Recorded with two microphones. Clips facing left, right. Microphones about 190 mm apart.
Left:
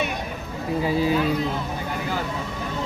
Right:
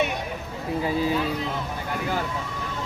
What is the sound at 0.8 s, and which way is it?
Speech, 10° left (ahead or behind).